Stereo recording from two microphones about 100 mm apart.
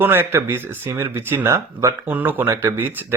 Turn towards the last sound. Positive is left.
turn(degrees=-25)  # may be behind; listen again after turning